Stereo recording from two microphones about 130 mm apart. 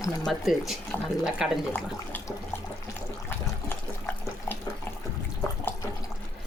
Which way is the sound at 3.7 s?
15° left (ahead or behind).